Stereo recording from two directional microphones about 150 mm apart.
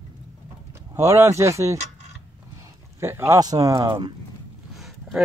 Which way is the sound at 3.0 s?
15° right (ahead or behind).